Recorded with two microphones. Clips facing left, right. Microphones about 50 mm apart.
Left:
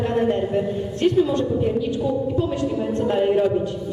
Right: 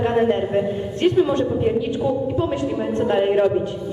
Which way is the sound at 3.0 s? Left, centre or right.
Right.